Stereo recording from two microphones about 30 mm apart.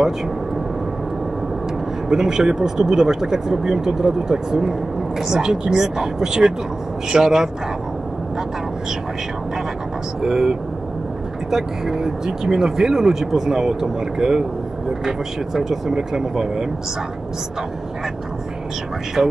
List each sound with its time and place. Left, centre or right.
2.0 s speech: centre
10.2 s speech: centre
19.2 s speech: centre